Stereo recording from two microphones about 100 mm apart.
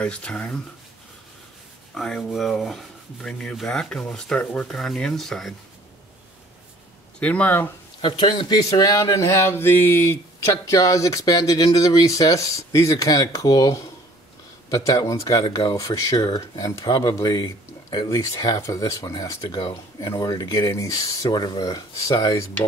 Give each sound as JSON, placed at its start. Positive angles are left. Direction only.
{"t": 0.0, "sound": "speech", "side_deg": 10}
{"t": 2.0, "sound": "speech", "side_deg": 5}
{"t": 7.2, "sound": "speech", "side_deg": 15}
{"t": 8.0, "sound": "speech", "side_deg": 55}